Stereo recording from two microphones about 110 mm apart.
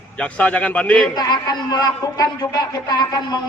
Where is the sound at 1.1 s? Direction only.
40° left (ahead or behind).